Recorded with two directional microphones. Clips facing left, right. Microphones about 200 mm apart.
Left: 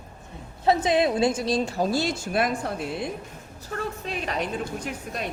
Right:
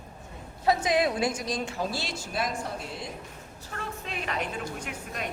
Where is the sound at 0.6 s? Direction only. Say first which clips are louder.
Left 3 dB; 25° left (ahead or behind); by 2.5 s 55° left (ahead or behind).